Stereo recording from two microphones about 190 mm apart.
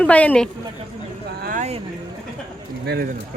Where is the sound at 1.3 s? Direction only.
55° right (ahead or behind).